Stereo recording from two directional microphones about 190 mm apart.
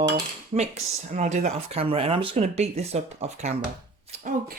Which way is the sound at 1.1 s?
40° right (ahead or behind).